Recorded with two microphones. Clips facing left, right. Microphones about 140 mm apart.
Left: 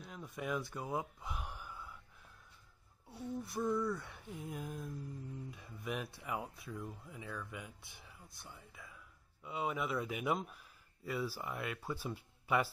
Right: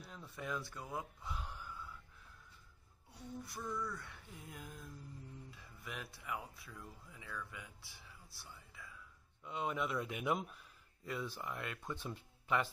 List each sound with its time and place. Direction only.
0.0 s a sound: 15° left (ahead or behind)
3.1 s speech: 25° left (ahead or behind)
9.4 s speech: 5° left (ahead or behind)